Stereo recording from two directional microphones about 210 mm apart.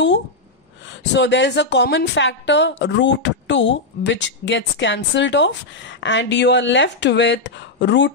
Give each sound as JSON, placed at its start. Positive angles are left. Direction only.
{"t": 0.8, "sound": "a woman's voice", "side_deg": 60}